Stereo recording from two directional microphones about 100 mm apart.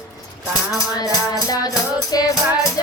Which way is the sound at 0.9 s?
40° left (ahead or behind).